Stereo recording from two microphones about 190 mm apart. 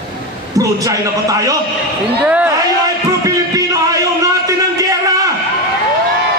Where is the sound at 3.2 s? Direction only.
20° right (ahead or behind).